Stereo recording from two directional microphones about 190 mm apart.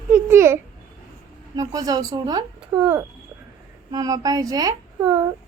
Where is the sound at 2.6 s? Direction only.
5° right (ahead or behind).